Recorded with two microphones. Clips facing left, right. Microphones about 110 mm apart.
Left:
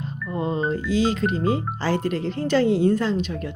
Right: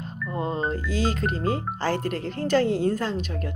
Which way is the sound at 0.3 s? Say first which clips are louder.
Left 3 dB; 40° right (ahead or behind).